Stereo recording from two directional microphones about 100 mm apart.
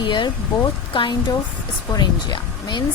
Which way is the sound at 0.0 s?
50° left (ahead or behind).